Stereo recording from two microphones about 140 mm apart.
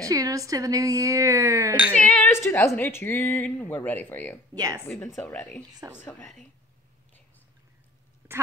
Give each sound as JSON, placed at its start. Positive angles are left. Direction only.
{"t": 0.0, "sound": "a woman's voice", "side_deg": -25}
{"t": 2.0, "sound": "a woman's voice", "side_deg": 10}
{"t": 4.6, "sound": "a woman's voice", "side_deg": -25}
{"t": 4.8, "sound": "speech", "side_deg": 15}
{"t": 5.8, "sound": "a woman's voice", "side_deg": -25}